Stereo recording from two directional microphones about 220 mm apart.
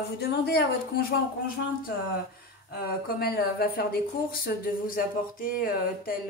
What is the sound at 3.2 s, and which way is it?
Speech, 45° left (ahead or behind).